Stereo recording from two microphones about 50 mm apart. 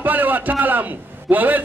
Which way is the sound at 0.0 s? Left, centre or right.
Right.